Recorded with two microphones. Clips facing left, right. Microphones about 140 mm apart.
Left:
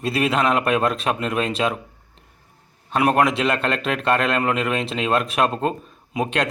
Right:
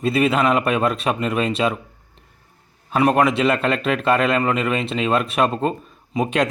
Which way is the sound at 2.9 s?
Centre (ahead or behind).